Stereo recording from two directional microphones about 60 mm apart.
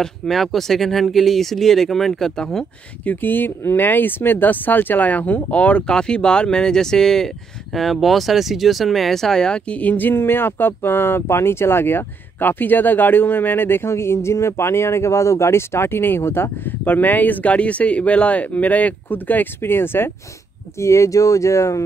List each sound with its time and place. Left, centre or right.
0.0 s speech: centre
3.1 s speech: left
16.8 s speech: left
20.8 s speech: left